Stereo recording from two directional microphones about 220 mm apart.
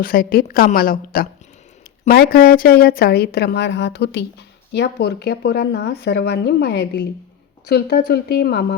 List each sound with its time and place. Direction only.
0.0 s a woman's voice: 40° left (ahead or behind)